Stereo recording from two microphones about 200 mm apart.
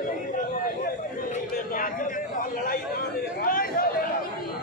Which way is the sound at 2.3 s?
45° left (ahead or behind).